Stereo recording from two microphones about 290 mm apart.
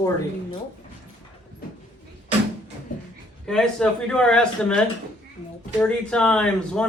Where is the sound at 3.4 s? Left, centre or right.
Centre.